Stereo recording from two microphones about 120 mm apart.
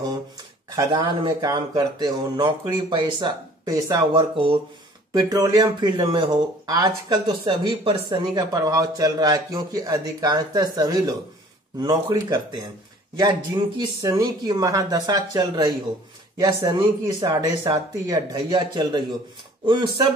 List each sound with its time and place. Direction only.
0.7 s speech: 35° right (ahead or behind)
5.1 s speech: 30° right (ahead or behind)